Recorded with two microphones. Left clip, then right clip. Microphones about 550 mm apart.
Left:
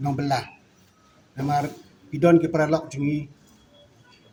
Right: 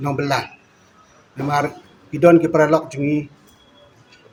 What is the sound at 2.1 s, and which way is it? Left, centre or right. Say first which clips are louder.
A man's voice: right 6 dB; left.